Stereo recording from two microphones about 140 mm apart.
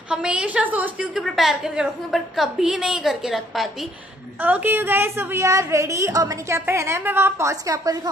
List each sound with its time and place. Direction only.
0.1 s a woman's voice: 5° right (ahead or behind)
4.4 s a woman's voice: 10° right (ahead or behind)